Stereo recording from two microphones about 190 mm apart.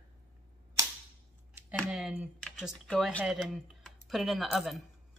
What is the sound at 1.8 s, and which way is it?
Speech, 5° right (ahead or behind).